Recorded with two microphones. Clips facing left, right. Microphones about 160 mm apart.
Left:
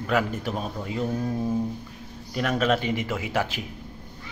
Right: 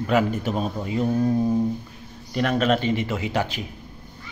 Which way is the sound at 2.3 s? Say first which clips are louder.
Right 3 dB; 5° left (ahead or behind).